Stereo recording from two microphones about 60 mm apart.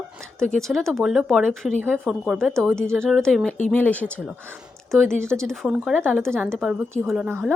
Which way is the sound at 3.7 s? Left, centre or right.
Left.